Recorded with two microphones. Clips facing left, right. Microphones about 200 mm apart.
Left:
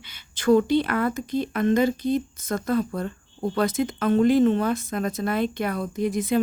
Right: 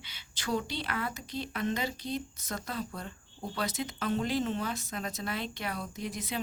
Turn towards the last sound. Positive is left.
turn(degrees=50)  # may be behind; listen again after turning